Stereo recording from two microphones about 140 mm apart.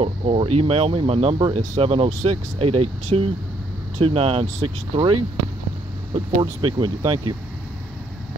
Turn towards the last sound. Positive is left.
turn(degrees=-25)  # may be behind; listen again after turning